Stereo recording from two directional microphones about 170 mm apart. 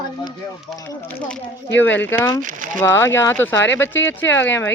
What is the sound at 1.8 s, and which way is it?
Speech, 10° left (ahead or behind).